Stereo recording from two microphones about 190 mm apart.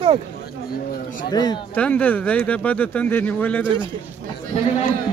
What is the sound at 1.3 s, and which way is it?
Speech, 20° left (ahead or behind).